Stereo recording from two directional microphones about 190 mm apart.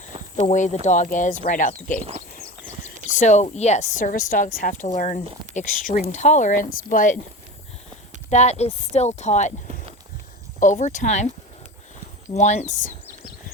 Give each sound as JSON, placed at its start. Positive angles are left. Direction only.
{"t": 0.4, "sound": "a woman's voice", "side_deg": 40}
{"t": 3.1, "sound": "a woman's voice", "side_deg": 40}
{"t": 8.3, "sound": "a woman's voice", "side_deg": 35}
{"t": 12.3, "sound": "a woman's voice", "side_deg": 40}